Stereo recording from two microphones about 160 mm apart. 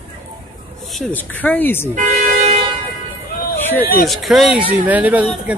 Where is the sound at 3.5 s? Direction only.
10° left (ahead or behind).